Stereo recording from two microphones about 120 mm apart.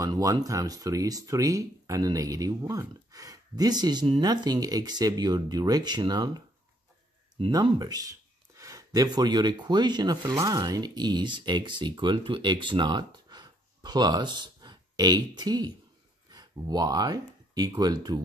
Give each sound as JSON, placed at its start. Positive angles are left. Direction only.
{"t": 0.0, "sound": "speech", "side_deg": -30}
{"t": 7.8, "sound": "speech", "side_deg": -30}